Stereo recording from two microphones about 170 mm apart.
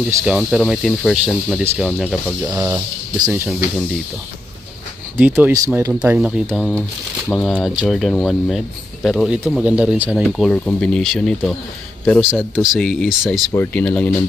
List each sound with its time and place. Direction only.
0.2 s speech: 5° right (ahead or behind)
2.4 s speech: 20° right (ahead or behind)
5.1 s speech: 10° right (ahead or behind)
13.5 s speech: 10° left (ahead or behind)